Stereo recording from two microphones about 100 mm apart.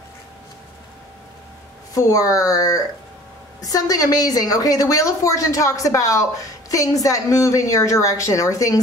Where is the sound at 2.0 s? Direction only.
35° left (ahead or behind).